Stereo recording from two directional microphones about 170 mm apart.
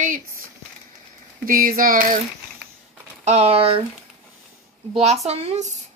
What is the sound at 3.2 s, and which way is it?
Speech, 35° right (ahead or behind).